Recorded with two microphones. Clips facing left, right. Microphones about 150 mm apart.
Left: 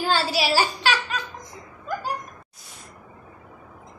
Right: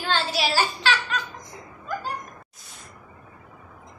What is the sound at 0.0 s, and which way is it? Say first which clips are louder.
Child singing: left 2 dB; 10° left (ahead or behind).